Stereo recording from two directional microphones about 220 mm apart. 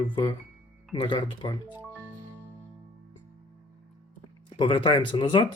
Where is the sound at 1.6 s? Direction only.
10° right (ahead or behind).